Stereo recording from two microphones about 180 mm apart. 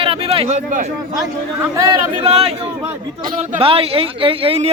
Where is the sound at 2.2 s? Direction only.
35° right (ahead or behind).